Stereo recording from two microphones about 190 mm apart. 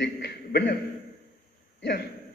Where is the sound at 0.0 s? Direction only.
60° left (ahead or behind).